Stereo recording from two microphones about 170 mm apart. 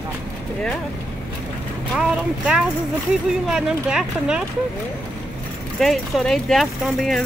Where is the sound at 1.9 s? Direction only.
5° right (ahead or behind).